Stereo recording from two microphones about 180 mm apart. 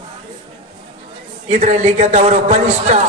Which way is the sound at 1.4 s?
40° right (ahead or behind).